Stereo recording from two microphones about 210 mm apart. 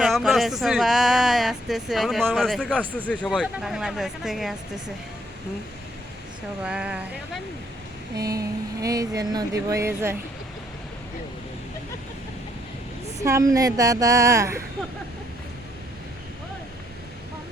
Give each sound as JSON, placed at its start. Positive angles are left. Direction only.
{"t": 0.0, "sound": "speech", "side_deg": 0}
{"t": 6.7, "sound": "speech", "side_deg": -5}
{"t": 8.1, "sound": "speech", "side_deg": -15}
{"t": 13.1, "sound": "speech", "side_deg": -15}